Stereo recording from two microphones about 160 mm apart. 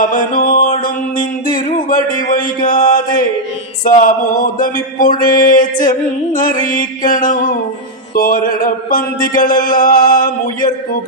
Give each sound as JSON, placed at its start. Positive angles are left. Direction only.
{"t": 0.0, "sound": "music", "side_deg": 60}
{"t": 1.9, "sound": "a sound", "side_deg": 55}
{"t": 3.8, "sound": "music", "side_deg": 60}